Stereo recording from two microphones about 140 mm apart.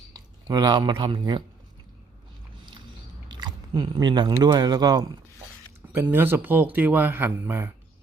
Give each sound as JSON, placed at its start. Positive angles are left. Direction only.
{"t": 0.4, "sound": "speech", "side_deg": -30}
{"t": 3.2, "sound": "biting", "side_deg": -30}
{"t": 4.4, "sound": "speech", "side_deg": -30}
{"t": 6.0, "sound": "speech", "side_deg": -15}